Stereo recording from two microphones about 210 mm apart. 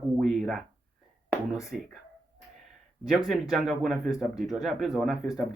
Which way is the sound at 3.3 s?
Centre (ahead or behind).